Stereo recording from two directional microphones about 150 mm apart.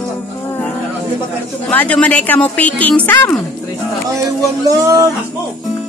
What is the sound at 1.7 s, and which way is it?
Speech, 10° left (ahead or behind).